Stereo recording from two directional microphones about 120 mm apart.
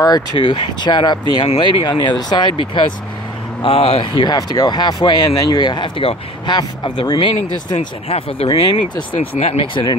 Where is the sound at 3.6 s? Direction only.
50° left (ahead or behind).